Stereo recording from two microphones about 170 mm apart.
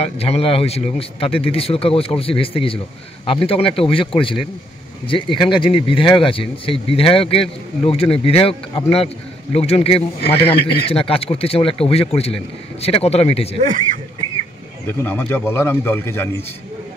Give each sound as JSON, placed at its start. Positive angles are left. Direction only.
{"t": 0.0, "sound": "speech", "side_deg": 35}
{"t": 14.9, "sound": "a man's voice", "side_deg": 10}